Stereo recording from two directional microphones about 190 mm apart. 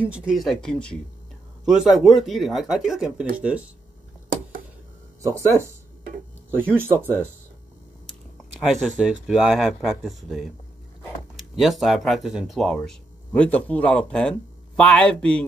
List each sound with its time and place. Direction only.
0.0 s speech: 5° right (ahead or behind)
5.2 s speech: 15° right (ahead or behind)
8.1 s speech: centre (ahead or behind)